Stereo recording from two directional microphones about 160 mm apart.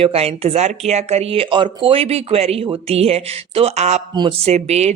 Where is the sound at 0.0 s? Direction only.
40° right (ahead or behind).